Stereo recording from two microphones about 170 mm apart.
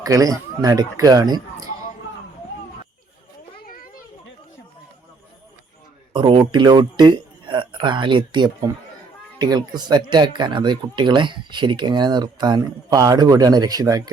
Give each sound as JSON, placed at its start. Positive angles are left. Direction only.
{"t": 0.0, "sound": "speech", "side_deg": -20}
{"t": 3.7, "sound": "children playing", "side_deg": 55}
{"t": 6.1, "sound": "speech", "side_deg": -30}